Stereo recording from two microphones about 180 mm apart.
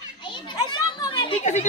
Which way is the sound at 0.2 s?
25° left (ahead or behind).